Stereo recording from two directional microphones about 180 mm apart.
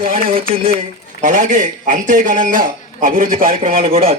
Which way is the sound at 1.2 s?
45° right (ahead or behind).